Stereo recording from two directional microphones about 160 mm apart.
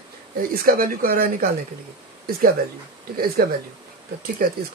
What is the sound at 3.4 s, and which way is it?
Speech, 65° right (ahead or behind).